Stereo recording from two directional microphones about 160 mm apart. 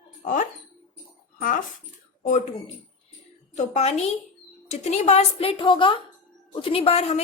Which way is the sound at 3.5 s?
45° left (ahead or behind).